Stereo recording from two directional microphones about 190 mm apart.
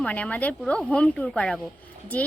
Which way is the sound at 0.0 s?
5° left (ahead or behind).